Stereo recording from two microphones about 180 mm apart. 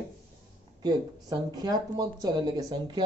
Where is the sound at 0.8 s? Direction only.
20° right (ahead or behind).